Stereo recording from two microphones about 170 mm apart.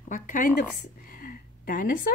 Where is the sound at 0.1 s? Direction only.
50° left (ahead or behind).